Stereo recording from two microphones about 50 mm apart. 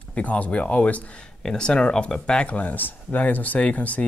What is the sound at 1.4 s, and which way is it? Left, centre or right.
Speech, centre.